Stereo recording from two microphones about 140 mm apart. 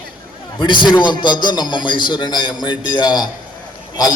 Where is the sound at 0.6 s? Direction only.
35° left (ahead or behind).